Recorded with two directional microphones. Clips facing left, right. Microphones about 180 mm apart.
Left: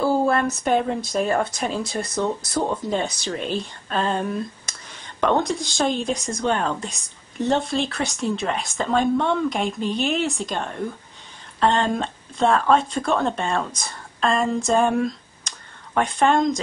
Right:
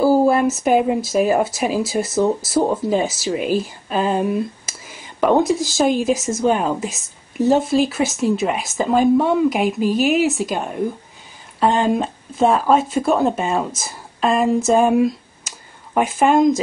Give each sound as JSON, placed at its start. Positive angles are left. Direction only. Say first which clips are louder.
{"t": 0.0, "sound": "speech", "louder": "right 6 dB", "side_deg": -5}